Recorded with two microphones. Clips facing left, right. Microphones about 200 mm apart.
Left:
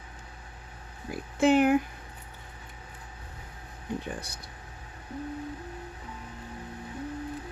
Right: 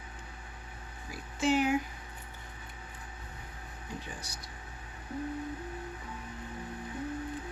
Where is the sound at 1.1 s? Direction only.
55° left (ahead or behind).